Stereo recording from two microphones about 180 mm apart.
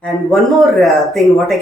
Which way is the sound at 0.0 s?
Centre (ahead or behind).